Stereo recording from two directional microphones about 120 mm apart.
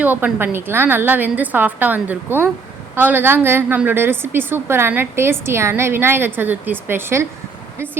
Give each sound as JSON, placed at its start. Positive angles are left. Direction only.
{"t": 0.0, "sound": "a woman's voice", "side_deg": -15}